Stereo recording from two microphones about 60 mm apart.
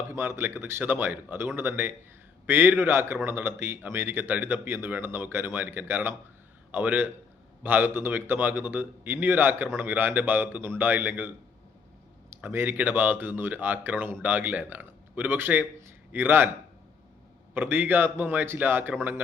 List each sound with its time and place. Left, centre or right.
0.1 s speech: right
12.4 s speech: right
17.5 s speech: right